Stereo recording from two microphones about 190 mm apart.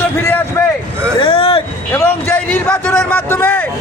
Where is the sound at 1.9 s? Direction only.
10° left (ahead or behind).